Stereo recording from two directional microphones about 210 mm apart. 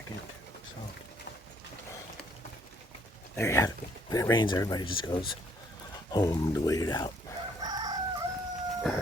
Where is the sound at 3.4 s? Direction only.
15° left (ahead or behind).